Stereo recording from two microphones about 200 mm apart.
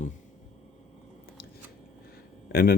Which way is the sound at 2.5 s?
50° left (ahead or behind).